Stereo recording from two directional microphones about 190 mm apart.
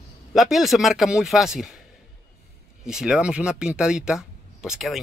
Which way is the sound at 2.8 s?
5° right (ahead or behind).